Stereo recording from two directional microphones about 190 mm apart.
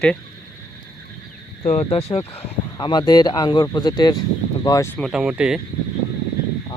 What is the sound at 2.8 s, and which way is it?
Speech, 20° left (ahead or behind).